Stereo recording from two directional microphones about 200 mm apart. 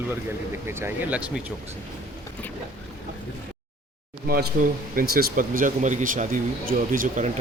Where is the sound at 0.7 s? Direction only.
10° right (ahead or behind).